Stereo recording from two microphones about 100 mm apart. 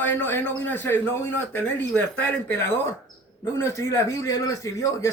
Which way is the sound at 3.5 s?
25° left (ahead or behind).